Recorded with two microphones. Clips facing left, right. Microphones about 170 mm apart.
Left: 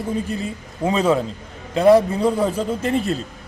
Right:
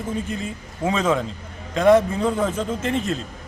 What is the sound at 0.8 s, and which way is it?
A man's voice, 35° left (ahead or behind).